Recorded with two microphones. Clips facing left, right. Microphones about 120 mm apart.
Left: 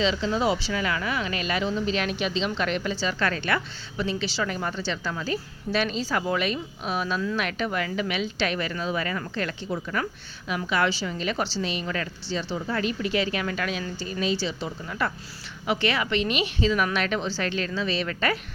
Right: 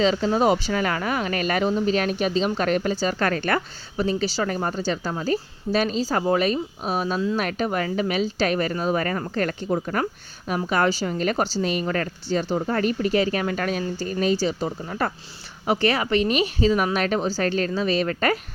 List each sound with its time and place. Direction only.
0.0 s speech: 45° right (ahead or behind)